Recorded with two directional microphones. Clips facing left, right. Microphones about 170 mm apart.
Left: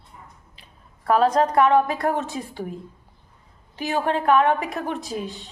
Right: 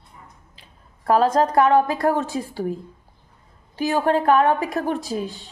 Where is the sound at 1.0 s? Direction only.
35° right (ahead or behind).